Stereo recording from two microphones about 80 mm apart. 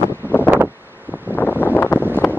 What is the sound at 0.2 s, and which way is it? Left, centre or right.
Wind, right.